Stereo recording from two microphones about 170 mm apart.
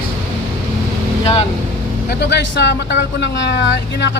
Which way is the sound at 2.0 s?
80° left.